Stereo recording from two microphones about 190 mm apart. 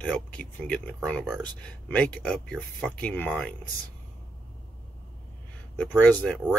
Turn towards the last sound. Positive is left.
turn(degrees=5)  # may be behind; listen again after turning